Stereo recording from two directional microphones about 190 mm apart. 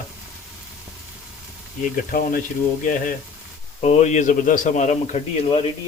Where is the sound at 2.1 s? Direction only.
45° left (ahead or behind).